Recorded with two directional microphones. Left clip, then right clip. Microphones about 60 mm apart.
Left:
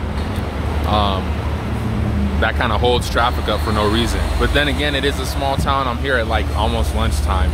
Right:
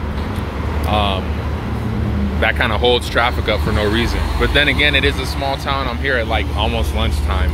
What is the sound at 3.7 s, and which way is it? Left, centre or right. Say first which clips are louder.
Speech: left 3 dB; left.